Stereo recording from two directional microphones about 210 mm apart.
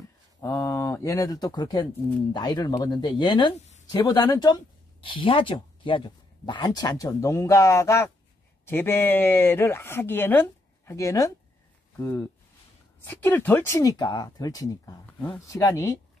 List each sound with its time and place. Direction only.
0.4 s speech: 15° left (ahead or behind)